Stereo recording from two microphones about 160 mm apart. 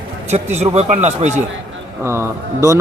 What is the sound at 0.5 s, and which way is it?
Speech, 40° right (ahead or behind).